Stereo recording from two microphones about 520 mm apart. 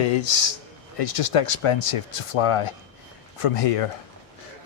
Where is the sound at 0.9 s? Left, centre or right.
Left.